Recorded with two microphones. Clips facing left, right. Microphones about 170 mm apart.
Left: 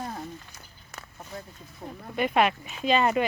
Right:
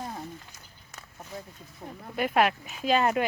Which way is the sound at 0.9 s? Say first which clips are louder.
Left 4 dB; 65° left (ahead or behind).